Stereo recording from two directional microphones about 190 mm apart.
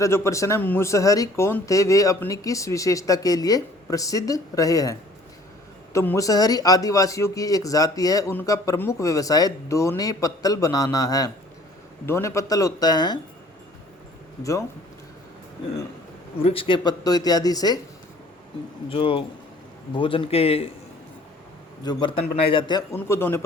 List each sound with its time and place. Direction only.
0.0 s a man's voice: 15° left (ahead or behind)
16.4 s a man's voice: 30° left (ahead or behind)
18.9 s a man's voice: 25° left (ahead or behind)
21.8 s a man's voice: 25° left (ahead or behind)
23.0 s a man's voice: 10° left (ahead or behind)